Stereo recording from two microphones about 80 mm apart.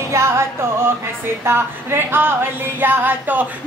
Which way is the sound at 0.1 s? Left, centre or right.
Right.